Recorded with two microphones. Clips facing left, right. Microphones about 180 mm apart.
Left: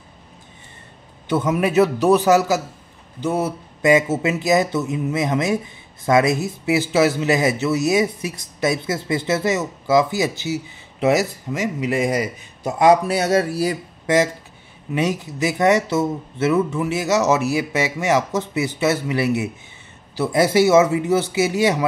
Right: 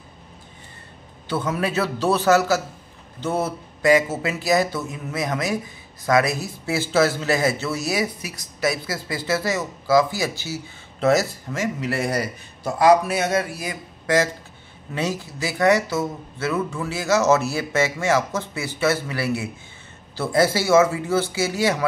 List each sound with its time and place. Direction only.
1.2 s a man's voice: 20° left (ahead or behind); by 13.7 s 35° left (ahead or behind)
14.0 s a man's voice: 20° left (ahead or behind)